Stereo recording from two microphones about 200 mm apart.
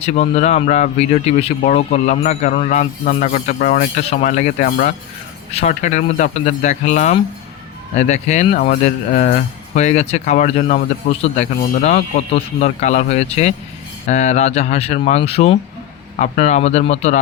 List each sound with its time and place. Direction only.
0.0 s speech: 35° left (ahead or behind)